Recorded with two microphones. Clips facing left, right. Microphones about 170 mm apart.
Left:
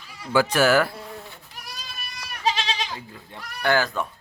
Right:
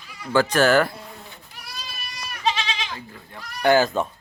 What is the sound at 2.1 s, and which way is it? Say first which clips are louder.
Goat: right 3 dB; 60° left (ahead or behind).